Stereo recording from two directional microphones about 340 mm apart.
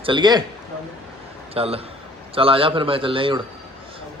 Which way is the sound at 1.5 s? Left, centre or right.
Centre.